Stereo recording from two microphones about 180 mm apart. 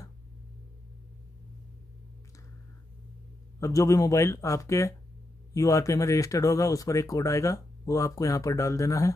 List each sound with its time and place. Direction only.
3.5 s speech: 15° left (ahead or behind)